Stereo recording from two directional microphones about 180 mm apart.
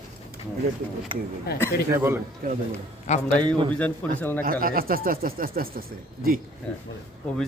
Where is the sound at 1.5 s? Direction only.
60° left (ahead or behind).